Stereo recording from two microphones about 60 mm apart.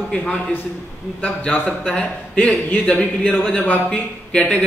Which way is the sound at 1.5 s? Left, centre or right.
Centre.